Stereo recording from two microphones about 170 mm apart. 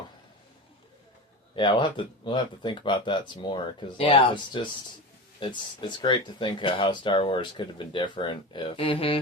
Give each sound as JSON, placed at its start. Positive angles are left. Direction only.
{"t": 1.5, "sound": "speech", "side_deg": 30}
{"t": 6.0, "sound": "speech", "side_deg": 25}